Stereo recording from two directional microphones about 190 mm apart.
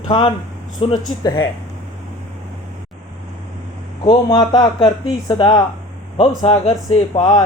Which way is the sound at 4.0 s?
25° left (ahead or behind).